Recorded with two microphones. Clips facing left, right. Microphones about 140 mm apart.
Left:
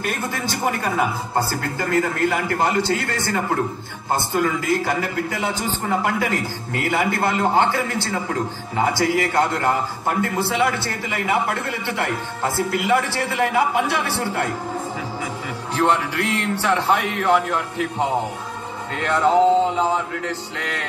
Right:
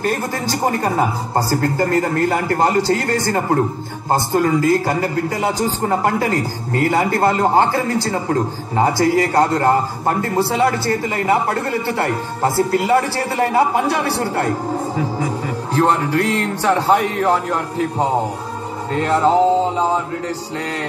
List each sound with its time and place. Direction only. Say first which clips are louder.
0.0 s a man's voice: right 5 dB; 40° right (ahead or behind)